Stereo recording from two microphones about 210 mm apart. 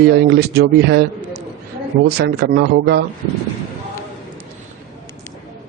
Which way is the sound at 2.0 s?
50° right (ahead or behind).